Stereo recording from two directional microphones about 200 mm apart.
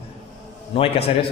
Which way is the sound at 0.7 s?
30° left (ahead or behind).